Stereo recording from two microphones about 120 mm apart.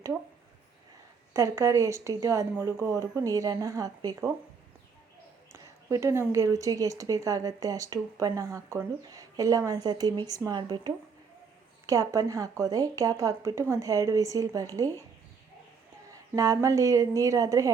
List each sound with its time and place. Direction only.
1.3 s speech: 25° right (ahead or behind)
5.5 s speech: 25° right (ahead or behind)
16.0 s speech: 30° right (ahead or behind)